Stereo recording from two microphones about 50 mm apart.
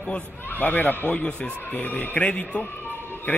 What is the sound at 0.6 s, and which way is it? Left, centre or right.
Speech, left.